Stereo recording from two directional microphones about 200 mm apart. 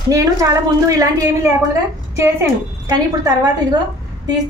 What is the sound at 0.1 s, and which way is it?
A woman's voice, 15° right (ahead or behind).